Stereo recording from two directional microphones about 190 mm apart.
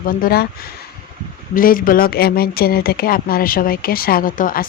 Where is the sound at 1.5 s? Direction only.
50° left (ahead or behind).